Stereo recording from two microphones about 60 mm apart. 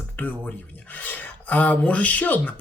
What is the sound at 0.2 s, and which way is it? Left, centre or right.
Speech, left.